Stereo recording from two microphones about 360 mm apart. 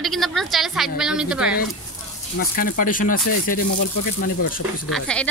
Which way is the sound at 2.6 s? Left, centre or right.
Left.